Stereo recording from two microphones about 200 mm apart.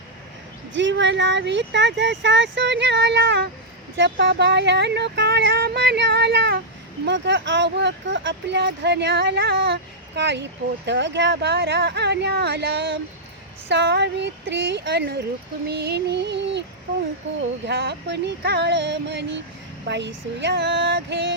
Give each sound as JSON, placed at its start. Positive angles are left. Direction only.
{"t": 0.7, "sound": "speech", "side_deg": -65}
{"t": 17.7, "sound": "speech", "side_deg": -60}